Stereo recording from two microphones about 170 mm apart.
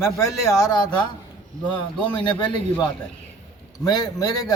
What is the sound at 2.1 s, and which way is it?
Speech, 25° left (ahead or behind).